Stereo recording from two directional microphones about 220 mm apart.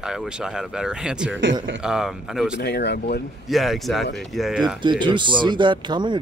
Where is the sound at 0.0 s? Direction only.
5° right (ahead or behind).